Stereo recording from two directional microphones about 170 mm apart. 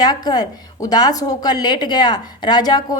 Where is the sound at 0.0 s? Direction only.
25° left (ahead or behind).